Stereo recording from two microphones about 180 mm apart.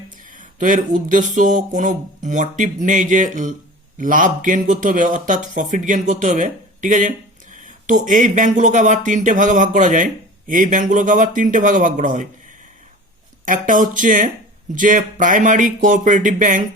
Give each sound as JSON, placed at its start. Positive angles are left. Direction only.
{"t": 0.3, "sound": "speech", "side_deg": -45}
{"t": 13.4, "sound": "speech", "side_deg": -50}